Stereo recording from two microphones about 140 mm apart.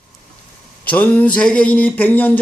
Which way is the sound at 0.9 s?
10° left (ahead or behind).